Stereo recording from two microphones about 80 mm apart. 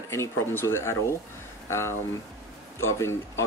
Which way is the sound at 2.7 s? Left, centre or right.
Left.